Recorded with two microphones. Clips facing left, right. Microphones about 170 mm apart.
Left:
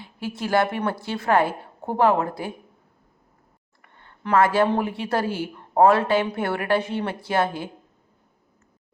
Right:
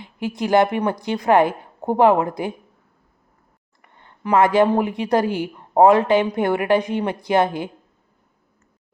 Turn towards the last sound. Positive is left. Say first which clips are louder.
# right 5 dB
turn(degrees=-15)  # may be behind; listen again after turning